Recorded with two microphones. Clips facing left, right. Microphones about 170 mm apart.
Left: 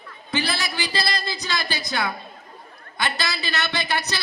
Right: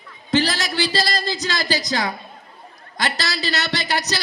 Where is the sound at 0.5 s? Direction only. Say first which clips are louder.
Right 5 dB; 40° right (ahead or behind).